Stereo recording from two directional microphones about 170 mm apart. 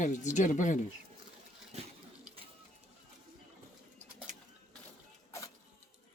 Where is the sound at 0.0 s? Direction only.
45° left (ahead or behind).